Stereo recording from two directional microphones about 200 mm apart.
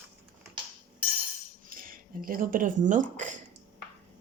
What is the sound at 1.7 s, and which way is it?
Speech, 45° right (ahead or behind).